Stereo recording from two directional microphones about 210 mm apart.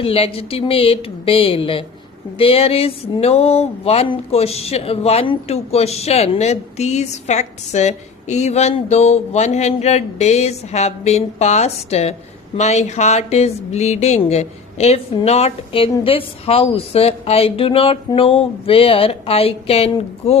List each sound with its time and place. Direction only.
0.0 s a woman's voice: 25° left (ahead or behind)
2.4 s a sound: 25° left (ahead or behind)
13.7 s a woman's voice: 30° left (ahead or behind)